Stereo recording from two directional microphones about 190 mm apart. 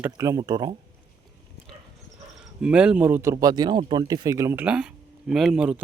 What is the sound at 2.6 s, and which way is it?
Speech, 5° right (ahead or behind).